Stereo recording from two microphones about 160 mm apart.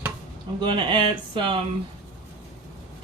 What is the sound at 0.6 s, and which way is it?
Speech, 30° right (ahead or behind).